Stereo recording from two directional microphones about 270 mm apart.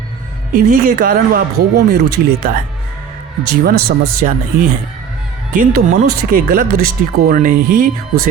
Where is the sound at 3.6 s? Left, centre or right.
Right.